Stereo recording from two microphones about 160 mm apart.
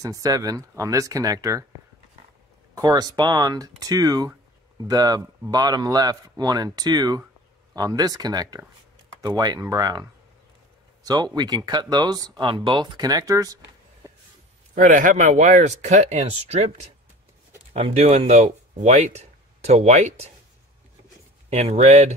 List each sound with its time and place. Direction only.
0.0 s speech: 20° right (ahead or behind)
2.7 s speech: 25° right (ahead or behind)
11.1 s speech: 25° right (ahead or behind)
14.0 s vehicle: 20° right (ahead or behind)
14.8 s speech: 55° right (ahead or behind)
17.7 s speech: 40° right (ahead or behind)
21.5 s speech: 40° right (ahead or behind)